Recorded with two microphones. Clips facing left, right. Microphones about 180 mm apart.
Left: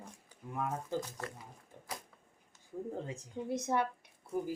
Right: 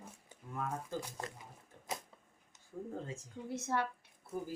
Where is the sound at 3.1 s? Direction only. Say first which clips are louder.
Left 5 dB; 15° left (ahead or behind).